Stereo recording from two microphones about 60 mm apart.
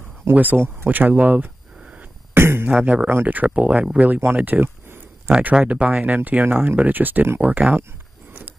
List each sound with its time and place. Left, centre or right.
0.3 s speech: right
2.3 s beatboxing: right
3.1 s speech: right